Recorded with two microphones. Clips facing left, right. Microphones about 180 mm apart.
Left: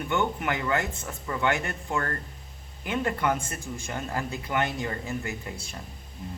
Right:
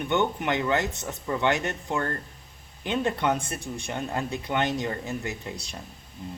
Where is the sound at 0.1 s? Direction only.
20° right (ahead or behind).